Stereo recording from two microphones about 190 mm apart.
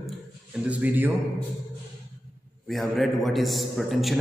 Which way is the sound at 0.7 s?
10° right (ahead or behind).